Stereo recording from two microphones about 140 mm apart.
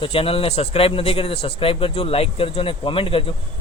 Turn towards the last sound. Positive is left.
turn(degrees=40)  # may be behind; listen again after turning